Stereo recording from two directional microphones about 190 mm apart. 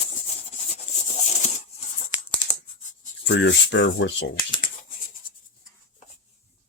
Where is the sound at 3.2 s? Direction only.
65° left (ahead or behind).